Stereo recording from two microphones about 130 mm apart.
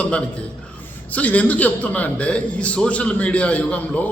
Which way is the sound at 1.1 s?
10° left (ahead or behind).